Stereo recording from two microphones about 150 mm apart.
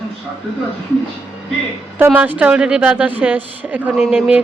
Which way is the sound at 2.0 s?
10° right (ahead or behind).